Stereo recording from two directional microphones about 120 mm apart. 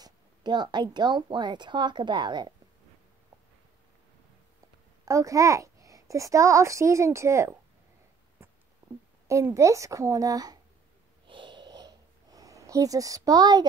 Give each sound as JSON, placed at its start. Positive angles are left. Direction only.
{"t": 0.0, "sound": "a woman's voice", "side_deg": -40}
{"t": 5.0, "sound": "a child's voice", "side_deg": -25}
{"t": 9.3, "sound": "speech", "side_deg": -25}
{"t": 11.2, "sound": "sniff", "side_deg": -45}